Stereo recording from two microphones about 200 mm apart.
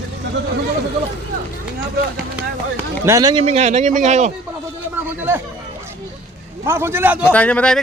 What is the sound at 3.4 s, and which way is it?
Speech, 35° right (ahead or behind).